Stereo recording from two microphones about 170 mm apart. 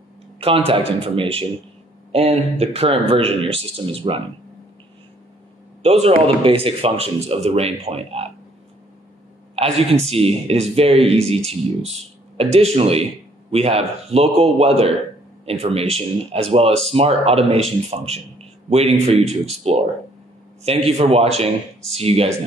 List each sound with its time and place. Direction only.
0.4 s speech: 35° right (ahead or behind)
5.8 s speech: 40° right (ahead or behind)
9.6 s speech: 35° right (ahead or behind)